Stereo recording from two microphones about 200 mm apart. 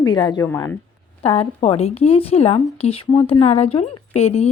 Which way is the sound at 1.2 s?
30° left (ahead or behind).